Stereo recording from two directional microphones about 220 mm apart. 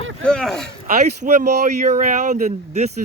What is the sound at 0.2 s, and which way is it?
Speech, 5° left (ahead or behind).